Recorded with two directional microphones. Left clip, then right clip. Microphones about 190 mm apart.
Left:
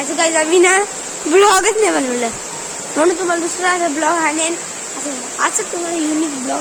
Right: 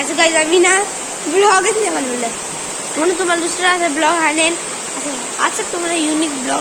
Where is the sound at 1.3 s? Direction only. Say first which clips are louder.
Left 1 dB; 65° left (ahead or behind).